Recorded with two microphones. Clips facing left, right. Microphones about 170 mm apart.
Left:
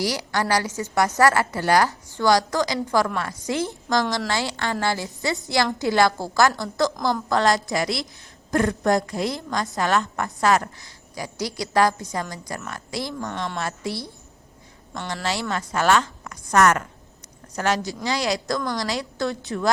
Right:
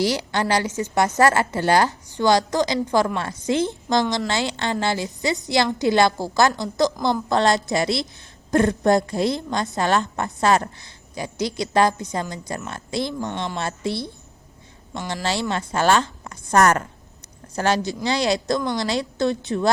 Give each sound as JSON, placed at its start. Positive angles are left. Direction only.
{"t": 0.0, "sound": "a woman's voice", "side_deg": -25}
{"t": 15.1, "sound": "a woman's voice", "side_deg": -30}